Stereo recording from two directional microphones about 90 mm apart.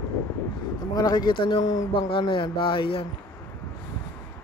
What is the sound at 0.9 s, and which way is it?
Speech, 50° left (ahead or behind).